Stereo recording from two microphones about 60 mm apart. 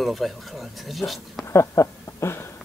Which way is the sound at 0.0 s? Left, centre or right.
Centre.